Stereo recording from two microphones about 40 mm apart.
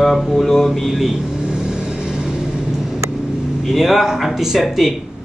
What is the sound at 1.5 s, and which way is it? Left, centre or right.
Vehicle, centre.